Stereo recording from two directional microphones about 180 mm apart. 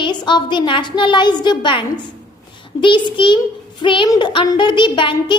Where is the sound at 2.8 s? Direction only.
25° left (ahead or behind).